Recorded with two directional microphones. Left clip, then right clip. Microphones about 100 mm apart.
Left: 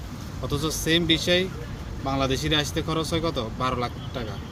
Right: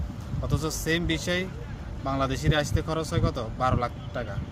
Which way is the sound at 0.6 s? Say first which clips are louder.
Left 4 dB; 55° right (ahead or behind).